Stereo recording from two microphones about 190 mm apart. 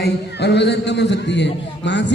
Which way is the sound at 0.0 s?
65° left (ahead or behind).